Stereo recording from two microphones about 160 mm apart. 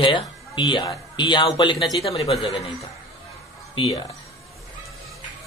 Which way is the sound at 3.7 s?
25° left (ahead or behind).